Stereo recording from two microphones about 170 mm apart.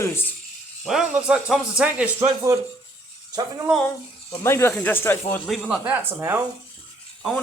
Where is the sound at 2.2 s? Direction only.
20° right (ahead or behind).